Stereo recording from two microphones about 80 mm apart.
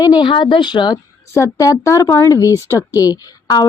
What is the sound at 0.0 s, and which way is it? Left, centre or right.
Speech, left.